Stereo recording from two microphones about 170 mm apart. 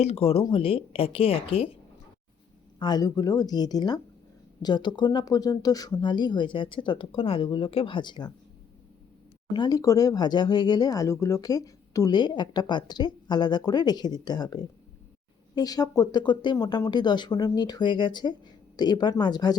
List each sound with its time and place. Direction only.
0.0 s speech: 35° left (ahead or behind)
9.5 s speech: 25° left (ahead or behind)